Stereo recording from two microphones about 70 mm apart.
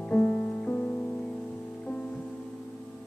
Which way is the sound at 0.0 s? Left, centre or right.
Centre.